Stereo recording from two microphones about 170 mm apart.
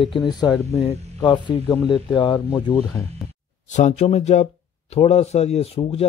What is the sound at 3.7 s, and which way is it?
Speech, 40° left (ahead or behind).